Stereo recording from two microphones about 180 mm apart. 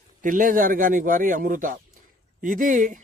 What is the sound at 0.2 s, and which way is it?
A man's voice, 50° right (ahead or behind).